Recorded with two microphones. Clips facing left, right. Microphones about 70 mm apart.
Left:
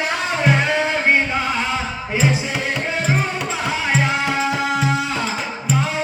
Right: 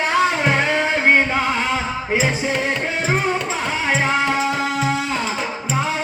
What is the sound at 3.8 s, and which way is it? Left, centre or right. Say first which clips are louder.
Music: right 2 dB; right.